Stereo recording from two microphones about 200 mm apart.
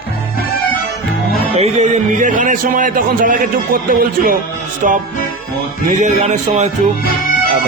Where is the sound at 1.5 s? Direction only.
35° right (ahead or behind).